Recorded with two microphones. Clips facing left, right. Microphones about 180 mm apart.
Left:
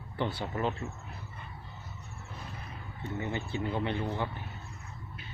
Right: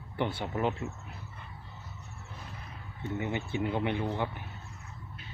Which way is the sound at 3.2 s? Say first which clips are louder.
Right 2 dB; 15° right (ahead or behind).